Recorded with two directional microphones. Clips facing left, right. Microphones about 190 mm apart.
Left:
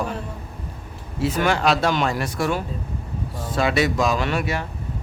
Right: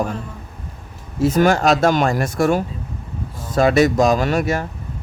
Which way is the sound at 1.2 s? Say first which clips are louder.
Right 5 dB; 45° right (ahead or behind).